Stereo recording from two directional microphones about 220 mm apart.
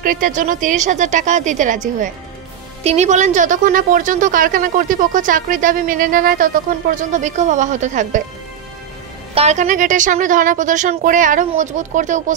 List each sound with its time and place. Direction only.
0.0 s a woman's voice: 40° right (ahead or behind)
9.3 s a woman's voice: 30° right (ahead or behind)